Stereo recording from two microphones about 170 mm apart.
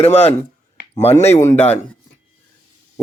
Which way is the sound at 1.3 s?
15° left (ahead or behind).